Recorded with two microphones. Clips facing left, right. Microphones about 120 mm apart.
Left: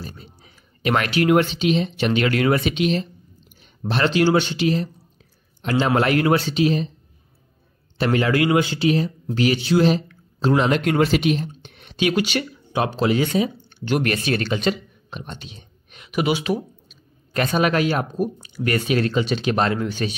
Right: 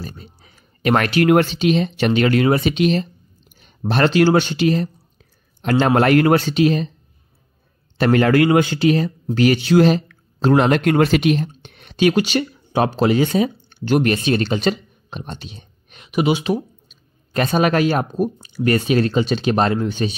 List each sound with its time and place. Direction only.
0.0 s speech: 45° right (ahead or behind)
2.7 s speech: 45° right (ahead or behind)
8.0 s speech: 50° right (ahead or behind); by 16.1 s 35° right (ahead or behind)
16.1 s speech: 25° right (ahead or behind)